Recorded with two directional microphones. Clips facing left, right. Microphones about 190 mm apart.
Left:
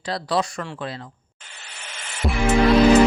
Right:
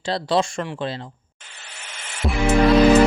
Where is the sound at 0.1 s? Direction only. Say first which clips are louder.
Right 3 dB; 25° right (ahead or behind).